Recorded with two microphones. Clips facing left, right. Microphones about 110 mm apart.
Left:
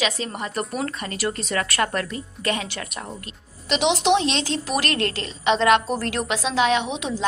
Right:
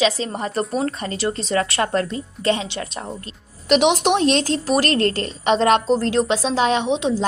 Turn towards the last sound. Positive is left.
turn(degrees=-30)  # may be behind; listen again after turning